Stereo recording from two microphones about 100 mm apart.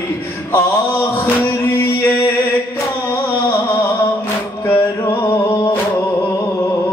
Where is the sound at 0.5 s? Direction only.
20° left (ahead or behind).